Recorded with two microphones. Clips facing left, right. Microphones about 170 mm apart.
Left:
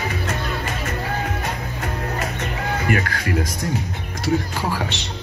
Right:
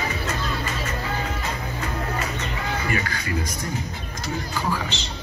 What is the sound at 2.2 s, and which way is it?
Music, 60° left (ahead or behind).